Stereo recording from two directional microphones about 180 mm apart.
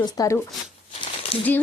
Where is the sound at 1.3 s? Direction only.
30° left (ahead or behind).